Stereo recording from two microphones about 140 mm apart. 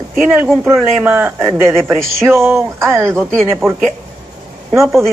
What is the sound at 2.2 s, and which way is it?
Speech, 15° right (ahead or behind).